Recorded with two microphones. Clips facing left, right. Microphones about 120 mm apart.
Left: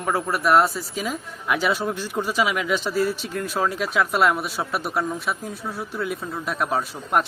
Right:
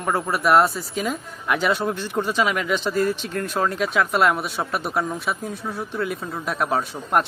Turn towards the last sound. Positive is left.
turn(degrees=0)  # may be behind; listen again after turning